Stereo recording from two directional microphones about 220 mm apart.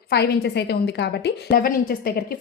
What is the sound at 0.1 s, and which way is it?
A woman's voice, 50° left (ahead or behind).